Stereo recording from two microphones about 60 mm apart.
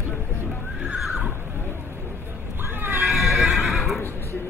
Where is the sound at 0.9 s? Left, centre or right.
Centre.